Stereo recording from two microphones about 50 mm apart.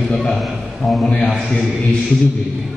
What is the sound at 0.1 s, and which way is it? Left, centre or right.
A man's voice, centre.